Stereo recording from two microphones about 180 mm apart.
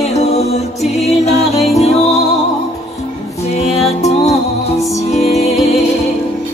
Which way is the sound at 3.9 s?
40° left (ahead or behind).